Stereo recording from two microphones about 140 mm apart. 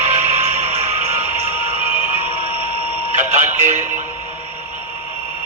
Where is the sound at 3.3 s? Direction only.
55° right (ahead or behind).